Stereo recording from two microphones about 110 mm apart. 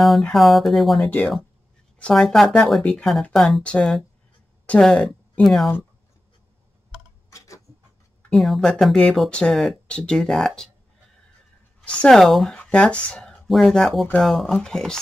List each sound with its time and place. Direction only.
0.0 s speech: centre (ahead or behind)
7.2 s tick-tock: 30° left (ahead or behind)
8.2 s speech: centre (ahead or behind)
11.8 s speech: 5° left (ahead or behind)